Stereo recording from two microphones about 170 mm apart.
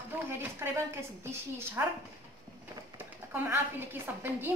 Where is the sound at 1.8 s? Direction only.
15° right (ahead or behind).